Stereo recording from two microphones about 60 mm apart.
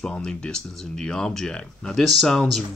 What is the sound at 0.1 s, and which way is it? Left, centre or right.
Speech, centre.